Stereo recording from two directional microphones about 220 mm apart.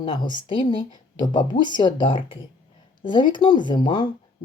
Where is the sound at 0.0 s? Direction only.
20° left (ahead or behind).